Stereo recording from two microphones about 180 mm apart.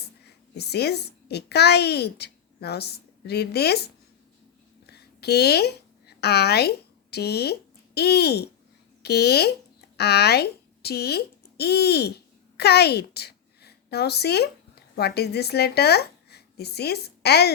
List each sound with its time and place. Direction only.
0.5 s a child's voice: 65° left (ahead or behind)
4.9 s a sound: 65° left (ahead or behind)
7.9 s speech: 65° left (ahead or behind)